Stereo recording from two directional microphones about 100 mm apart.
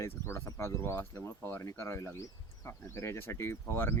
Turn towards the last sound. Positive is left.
turn(degrees=20)  # may be behind; listen again after turning